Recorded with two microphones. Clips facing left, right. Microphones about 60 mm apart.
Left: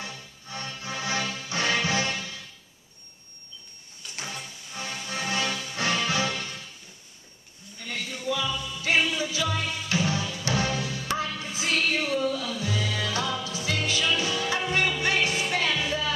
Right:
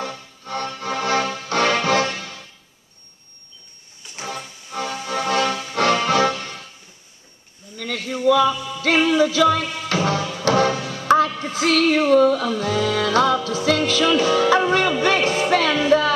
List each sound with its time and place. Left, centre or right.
0.0 s music: right
5.0 s music: right
7.7 s a sound: right
8.1 s music: right
10.7 s music: right
11.6 s female singing: right
12.4 s music: right
15.2 s music: right
15.5 s music: right